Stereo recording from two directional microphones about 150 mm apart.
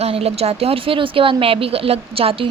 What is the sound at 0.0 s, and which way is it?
Speech, 40° right (ahead or behind).